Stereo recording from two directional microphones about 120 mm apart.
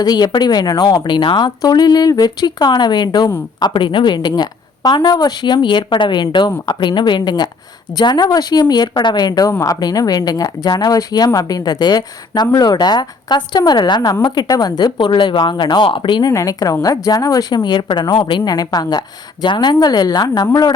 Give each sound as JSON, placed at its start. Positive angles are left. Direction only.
{"t": 0.0, "sound": "speech", "side_deg": 35}
{"t": 16.3, "sound": "speech", "side_deg": 30}